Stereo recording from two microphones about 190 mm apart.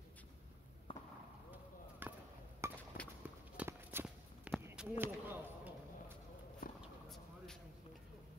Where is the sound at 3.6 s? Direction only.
10° right (ahead or behind).